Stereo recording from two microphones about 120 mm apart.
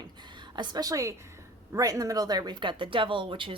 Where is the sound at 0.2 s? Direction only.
40° right (ahead or behind).